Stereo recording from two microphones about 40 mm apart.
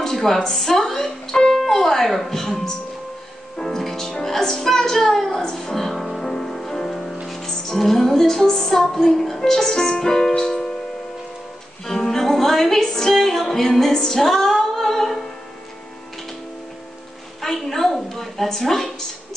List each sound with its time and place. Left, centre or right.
0.0 s a sound: centre
0.6 s music: centre
2.1 s a woman's voice: centre
3.5 s speech: centre
5.3 s a woman's voice: centre
5.9 s music: centre
6.2 s music: centre
8.5 s a woman's voice: centre
10.3 s music: left
11.8 s music: centre
17.6 s a woman's voice: centre